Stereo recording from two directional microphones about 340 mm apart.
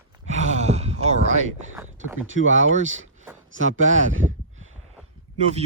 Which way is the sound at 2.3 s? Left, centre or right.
Right.